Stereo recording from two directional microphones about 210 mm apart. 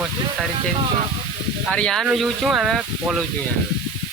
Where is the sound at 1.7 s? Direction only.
5° left (ahead or behind).